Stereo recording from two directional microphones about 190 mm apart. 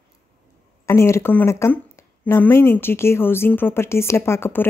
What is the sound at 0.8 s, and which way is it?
Speech, 15° left (ahead or behind).